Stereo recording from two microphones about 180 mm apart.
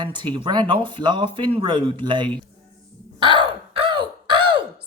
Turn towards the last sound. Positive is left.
turn(degrees=-25)  # may be behind; listen again after turning